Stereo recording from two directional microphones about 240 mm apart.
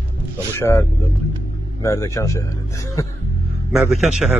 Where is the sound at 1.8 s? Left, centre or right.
Centre.